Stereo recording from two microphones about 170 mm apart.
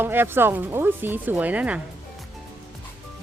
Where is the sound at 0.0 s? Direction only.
10° right (ahead or behind).